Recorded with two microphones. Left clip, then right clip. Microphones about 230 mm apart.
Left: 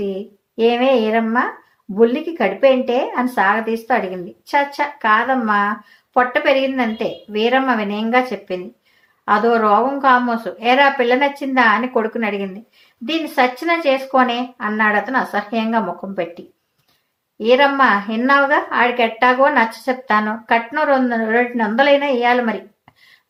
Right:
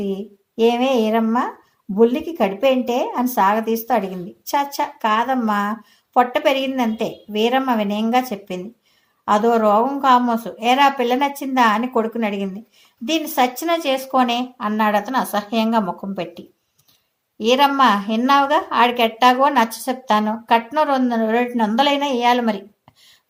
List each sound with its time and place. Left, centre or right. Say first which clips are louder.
0.6 s a woman's voice: left 2 dB; right
17.4 s a woman's voice: left 2 dB; right